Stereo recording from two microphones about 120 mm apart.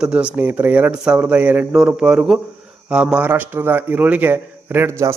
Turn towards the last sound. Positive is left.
turn(degrees=-20)  # may be behind; listen again after turning